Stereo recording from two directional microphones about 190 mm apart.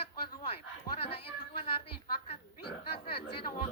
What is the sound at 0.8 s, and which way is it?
Speech, 30° left (ahead or behind).